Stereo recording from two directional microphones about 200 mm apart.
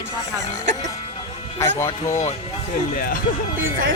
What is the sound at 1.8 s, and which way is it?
Speech, 15° left (ahead or behind).